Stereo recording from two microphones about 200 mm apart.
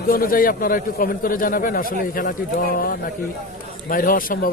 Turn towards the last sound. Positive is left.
turn(degrees=45)  # may be behind; listen again after turning